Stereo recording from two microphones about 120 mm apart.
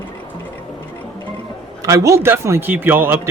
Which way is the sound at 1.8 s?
25° right (ahead or behind).